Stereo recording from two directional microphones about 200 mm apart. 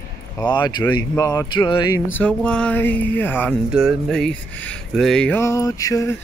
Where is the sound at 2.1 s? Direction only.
5° left (ahead or behind).